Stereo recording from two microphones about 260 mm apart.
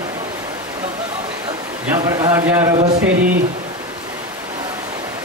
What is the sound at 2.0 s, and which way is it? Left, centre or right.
Speech, centre.